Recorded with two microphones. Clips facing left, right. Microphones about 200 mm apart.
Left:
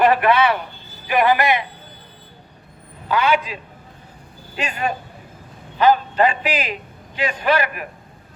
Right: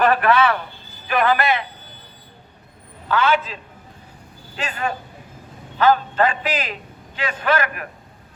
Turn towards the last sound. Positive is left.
turn(degrees=10)  # may be behind; listen again after turning